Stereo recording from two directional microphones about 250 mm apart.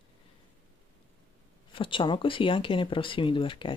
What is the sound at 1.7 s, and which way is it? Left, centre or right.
Speech, centre.